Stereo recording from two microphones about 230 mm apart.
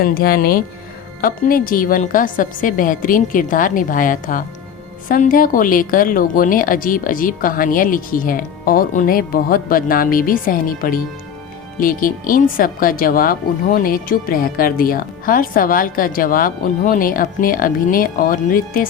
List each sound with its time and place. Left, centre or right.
0.0 s speech: left